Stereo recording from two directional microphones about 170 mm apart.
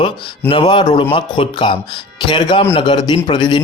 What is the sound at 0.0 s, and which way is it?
Speech, 30° left (ahead or behind).